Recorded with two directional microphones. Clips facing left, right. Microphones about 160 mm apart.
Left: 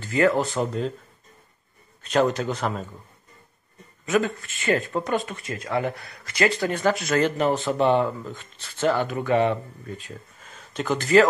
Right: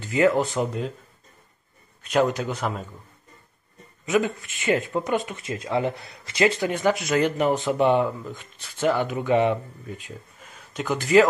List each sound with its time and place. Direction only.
0.0 s a sound: 15° right (ahead or behind)
0.4 s speech: 10° right (ahead or behind)
2.0 s speech: 10° right (ahead or behind)
4.0 s speech: 15° right (ahead or behind)